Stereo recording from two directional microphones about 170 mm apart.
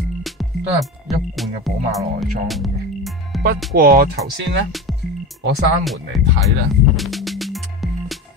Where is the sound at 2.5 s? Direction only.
Centre (ahead or behind).